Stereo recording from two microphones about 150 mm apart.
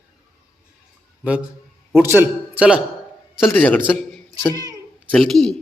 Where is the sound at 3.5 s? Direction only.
10° left (ahead or behind).